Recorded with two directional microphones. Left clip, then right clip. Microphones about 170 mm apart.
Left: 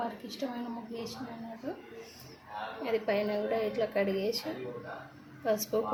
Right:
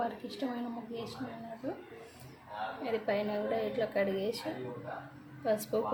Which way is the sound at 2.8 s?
5° left (ahead or behind).